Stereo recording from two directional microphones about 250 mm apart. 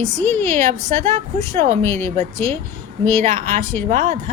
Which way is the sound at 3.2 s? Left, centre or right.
Right.